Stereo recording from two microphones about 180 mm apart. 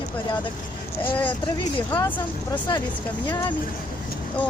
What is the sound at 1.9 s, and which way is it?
Speech, 10° left (ahead or behind).